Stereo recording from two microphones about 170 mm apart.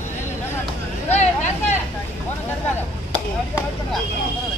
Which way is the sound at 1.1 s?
40° left (ahead or behind).